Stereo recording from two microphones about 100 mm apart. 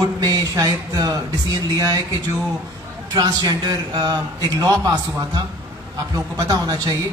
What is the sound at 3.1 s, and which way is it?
Speech, 40° right (ahead or behind).